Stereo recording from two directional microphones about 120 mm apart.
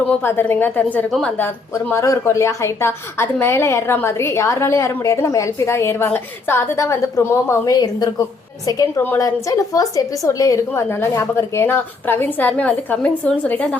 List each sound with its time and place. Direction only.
0.2 s a woman's voice: 15° left (ahead or behind)